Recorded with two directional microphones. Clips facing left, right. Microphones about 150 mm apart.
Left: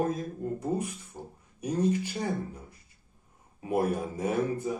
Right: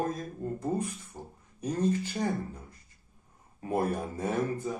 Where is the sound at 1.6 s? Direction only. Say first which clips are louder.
Left 1 dB; 10° left (ahead or behind).